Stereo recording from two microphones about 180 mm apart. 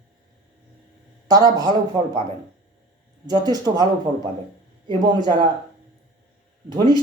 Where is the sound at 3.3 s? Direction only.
20° right (ahead or behind).